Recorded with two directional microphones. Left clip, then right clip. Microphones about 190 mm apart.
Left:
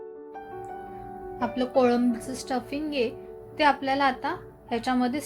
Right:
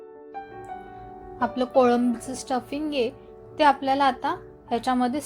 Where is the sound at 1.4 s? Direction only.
10° right (ahead or behind).